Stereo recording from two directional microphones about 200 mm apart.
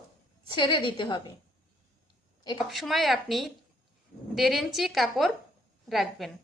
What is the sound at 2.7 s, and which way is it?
A woman's voice, centre (ahead or behind).